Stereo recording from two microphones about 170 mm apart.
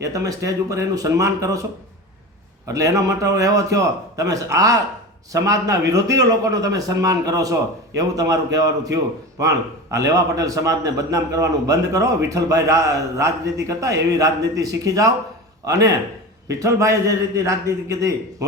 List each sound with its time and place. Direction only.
0.0 s a man's voice: 20° right (ahead or behind)
2.6 s a man's voice: 20° right (ahead or behind)